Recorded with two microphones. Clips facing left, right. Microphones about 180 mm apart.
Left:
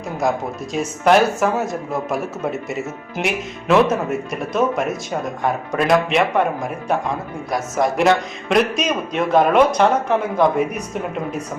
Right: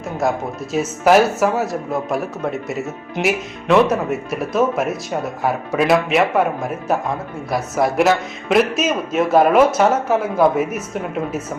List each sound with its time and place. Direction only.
0.2 s speech: centre (ahead or behind)